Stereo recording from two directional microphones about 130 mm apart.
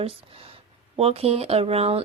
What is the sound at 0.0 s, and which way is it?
Speech, 45° right (ahead or behind).